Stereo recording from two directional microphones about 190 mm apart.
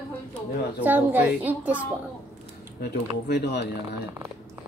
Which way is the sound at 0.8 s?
10° right (ahead or behind).